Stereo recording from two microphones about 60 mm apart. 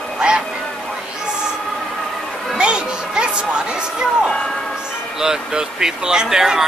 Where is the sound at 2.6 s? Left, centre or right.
Centre.